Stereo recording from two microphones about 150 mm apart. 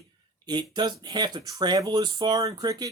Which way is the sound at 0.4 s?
30° right (ahead or behind).